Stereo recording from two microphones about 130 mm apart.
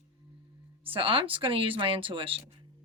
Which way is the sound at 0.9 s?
45° right (ahead or behind).